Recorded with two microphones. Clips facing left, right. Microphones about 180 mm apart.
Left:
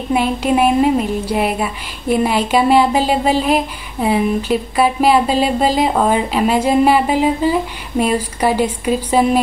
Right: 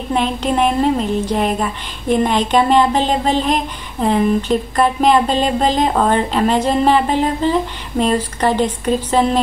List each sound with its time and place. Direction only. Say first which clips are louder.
0.1 s a woman's voice: left 2 dB; 10° left (ahead or behind)